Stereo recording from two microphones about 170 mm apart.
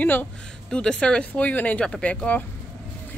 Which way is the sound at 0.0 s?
10° left (ahead or behind).